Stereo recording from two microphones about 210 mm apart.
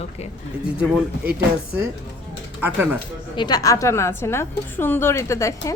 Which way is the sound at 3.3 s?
20° left (ahead or behind).